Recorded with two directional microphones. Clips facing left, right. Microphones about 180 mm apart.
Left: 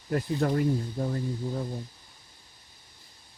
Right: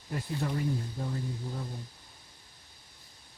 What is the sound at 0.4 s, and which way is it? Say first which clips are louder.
Speech: left 7 dB; 70° left (ahead or behind).